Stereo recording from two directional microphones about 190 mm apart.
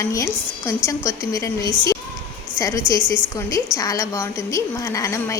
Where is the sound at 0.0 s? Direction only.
15° left (ahead or behind).